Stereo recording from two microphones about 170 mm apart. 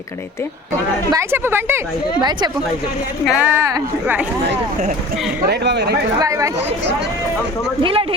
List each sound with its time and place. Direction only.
1.1 s speech: 15° right (ahead or behind)
3.2 s speech: 10° right (ahead or behind)
5.5 s speech: 75° right (ahead or behind)
6.1 s speech: 20° right (ahead or behind)
7.8 s speech: 30° right (ahead or behind)